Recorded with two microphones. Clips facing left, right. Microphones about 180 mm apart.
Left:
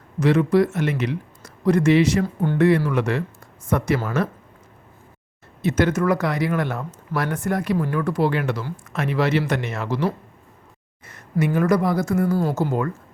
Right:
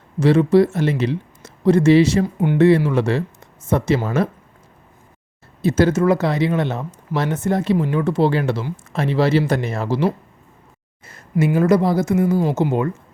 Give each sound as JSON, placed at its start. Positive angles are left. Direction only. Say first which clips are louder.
{"t": 0.2, "sound": "speech", "louder": "right 4 dB", "side_deg": -30}
{"t": 2.4, "sound": "speech", "louder": "right 5 dB", "side_deg": -15}
{"t": 2.6, "sound": "speech", "louder": "right 4 dB", "side_deg": -25}
{"t": 5.6, "sound": "speech", "louder": "right 4 dB", "side_deg": -30}